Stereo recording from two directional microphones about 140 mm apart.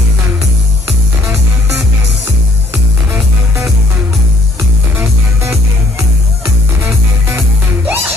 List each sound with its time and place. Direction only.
7.2 s music: 15° right (ahead or behind)